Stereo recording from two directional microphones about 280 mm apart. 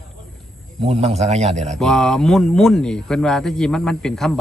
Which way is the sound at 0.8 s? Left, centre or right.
Right.